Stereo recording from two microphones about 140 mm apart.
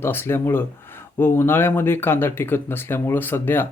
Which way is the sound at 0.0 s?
15° left (ahead or behind).